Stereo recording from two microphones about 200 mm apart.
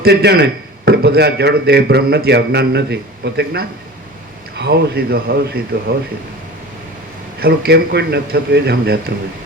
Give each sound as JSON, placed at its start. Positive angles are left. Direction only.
{"t": 0.0, "sound": "a man's voice", "side_deg": -55}
{"t": 7.3, "sound": "a man's voice", "side_deg": -50}